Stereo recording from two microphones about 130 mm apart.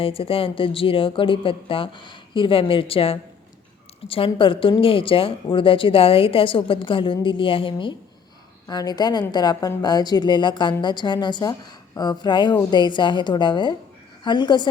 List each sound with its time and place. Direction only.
0.0 s speech: 45° left (ahead or behind)
8.6 s a woman's voice: 30° left (ahead or behind)